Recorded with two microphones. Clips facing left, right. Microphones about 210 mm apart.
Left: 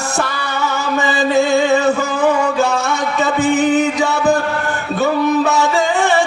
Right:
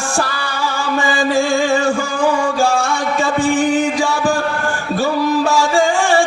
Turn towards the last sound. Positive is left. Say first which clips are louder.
# right 1 dB
turn(degrees=20)  # may be behind; listen again after turning